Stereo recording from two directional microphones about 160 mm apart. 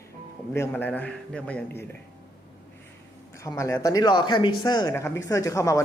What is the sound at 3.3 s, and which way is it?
Speech, 20° left (ahead or behind).